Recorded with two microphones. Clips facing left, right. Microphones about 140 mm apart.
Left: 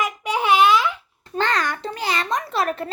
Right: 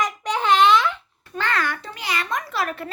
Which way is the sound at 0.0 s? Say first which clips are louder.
Left 1 dB; 10° left (ahead or behind).